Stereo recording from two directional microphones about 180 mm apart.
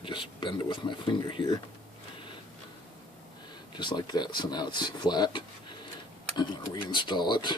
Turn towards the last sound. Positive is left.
turn(degrees=25)  # may be behind; listen again after turning